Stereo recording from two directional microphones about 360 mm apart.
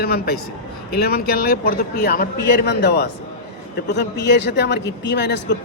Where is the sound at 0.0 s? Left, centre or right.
Left.